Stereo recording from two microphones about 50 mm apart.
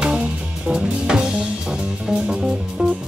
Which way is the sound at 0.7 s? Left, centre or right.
Centre.